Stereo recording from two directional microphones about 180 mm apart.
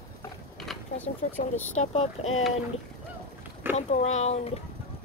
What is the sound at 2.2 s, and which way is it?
Speech, 35° left (ahead or behind).